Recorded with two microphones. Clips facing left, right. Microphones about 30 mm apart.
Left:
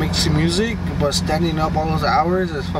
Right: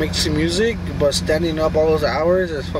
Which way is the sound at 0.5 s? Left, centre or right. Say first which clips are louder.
Right 2 dB; centre.